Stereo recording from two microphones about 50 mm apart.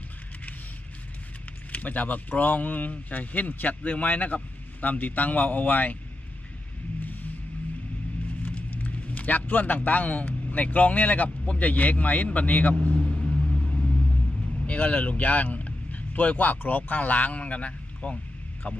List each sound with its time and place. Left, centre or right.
1.7 s speech: left
7.0 s a sound: left
8.4 s speech: left
12.8 s vehicle: left
14.7 s speech: left